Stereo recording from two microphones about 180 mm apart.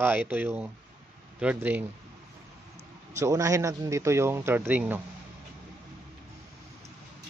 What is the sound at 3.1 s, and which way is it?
Speech, 15° right (ahead or behind).